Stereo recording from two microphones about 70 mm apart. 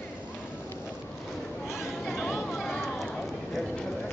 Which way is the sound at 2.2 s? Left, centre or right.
Centre.